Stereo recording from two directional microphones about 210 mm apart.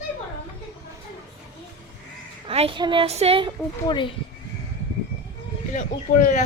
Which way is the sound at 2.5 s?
25° right (ahead or behind).